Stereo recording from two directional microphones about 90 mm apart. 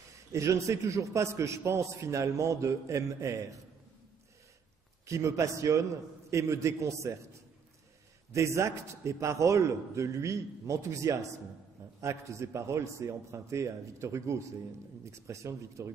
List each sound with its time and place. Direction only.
0.3 s a man's voice: 35° right (ahead or behind)
5.0 s a man's voice: 35° right (ahead or behind)
8.3 s a man's voice: 30° right (ahead or behind)